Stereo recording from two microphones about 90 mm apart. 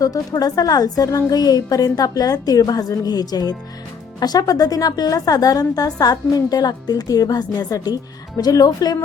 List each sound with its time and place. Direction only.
0.0 s a woman's voice: 40° left (ahead or behind)